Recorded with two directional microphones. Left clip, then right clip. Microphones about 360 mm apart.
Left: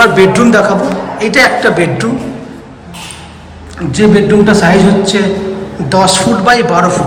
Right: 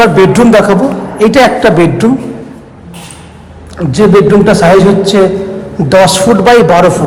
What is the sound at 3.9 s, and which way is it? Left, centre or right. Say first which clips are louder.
Speech: right 3 dB; centre.